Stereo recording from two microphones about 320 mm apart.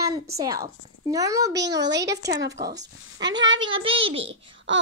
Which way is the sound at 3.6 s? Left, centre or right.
Centre.